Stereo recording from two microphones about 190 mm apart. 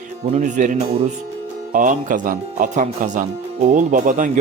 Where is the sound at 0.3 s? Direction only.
40° right (ahead or behind).